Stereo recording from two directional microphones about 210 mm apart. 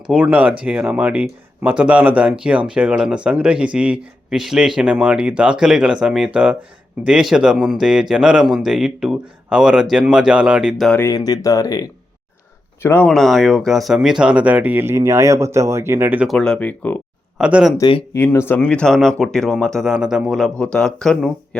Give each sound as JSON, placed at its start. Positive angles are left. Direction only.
{"t": 0.1, "sound": "speech", "side_deg": -5}
{"t": 11.0, "sound": "speech", "side_deg": 15}
{"t": 17.4, "sound": "speech", "side_deg": -5}
{"t": 17.7, "sound": "speech", "side_deg": 20}